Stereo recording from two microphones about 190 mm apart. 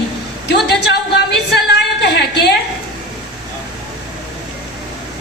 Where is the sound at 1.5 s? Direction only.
60° left (ahead or behind).